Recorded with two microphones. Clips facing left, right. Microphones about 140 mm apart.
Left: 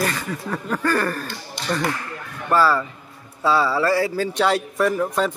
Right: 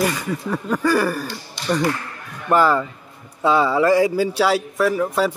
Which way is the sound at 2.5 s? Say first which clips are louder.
Right 2 dB; 20° right (ahead or behind).